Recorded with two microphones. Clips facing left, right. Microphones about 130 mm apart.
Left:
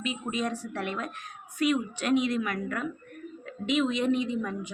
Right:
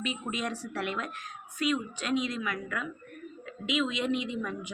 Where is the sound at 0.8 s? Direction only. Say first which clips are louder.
Right 1 dB; 45° left (ahead or behind).